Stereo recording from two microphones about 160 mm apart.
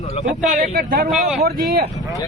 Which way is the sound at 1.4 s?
85° right.